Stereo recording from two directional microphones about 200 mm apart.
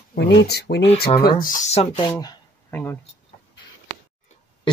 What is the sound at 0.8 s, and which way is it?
Speech, 30° left (ahead or behind).